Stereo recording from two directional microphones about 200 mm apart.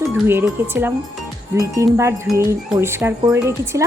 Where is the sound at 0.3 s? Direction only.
10° right (ahead or behind).